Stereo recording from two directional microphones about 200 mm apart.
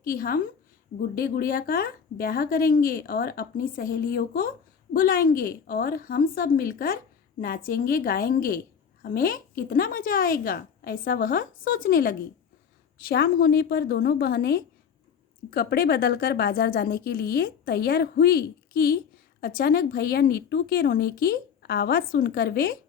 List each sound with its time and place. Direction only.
0.0 s a woman's voice: 45° left (ahead or behind)